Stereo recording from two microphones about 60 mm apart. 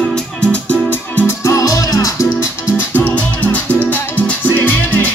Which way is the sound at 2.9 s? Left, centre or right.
Left.